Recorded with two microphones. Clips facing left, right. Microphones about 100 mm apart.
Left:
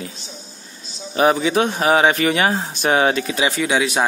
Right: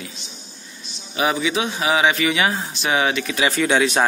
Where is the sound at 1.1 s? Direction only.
40° left (ahead or behind).